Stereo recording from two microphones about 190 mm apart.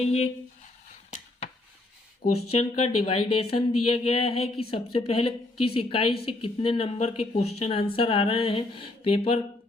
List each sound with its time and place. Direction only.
0.0 s speech: 35° left (ahead or behind)
2.3 s a woman's voice: 35° left (ahead or behind)